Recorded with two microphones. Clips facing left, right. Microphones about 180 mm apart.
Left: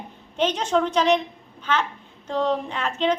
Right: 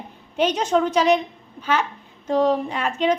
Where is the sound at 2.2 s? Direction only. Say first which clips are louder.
Right 4 dB; 10° right (ahead or behind).